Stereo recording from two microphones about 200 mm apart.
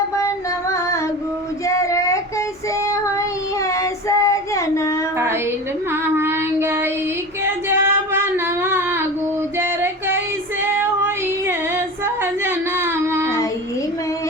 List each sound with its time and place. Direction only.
1.6 s child singing: 15° left (ahead or behind)
3.8 s child singing: 15° left (ahead or behind)
6.1 s child singing: 10° right (ahead or behind)
7.4 s female singing: 10° right (ahead or behind)
9.6 s music: 10° right (ahead or behind)
10.6 s female singing: 10° right (ahead or behind)
12.2 s a sound: 10° right (ahead or behind)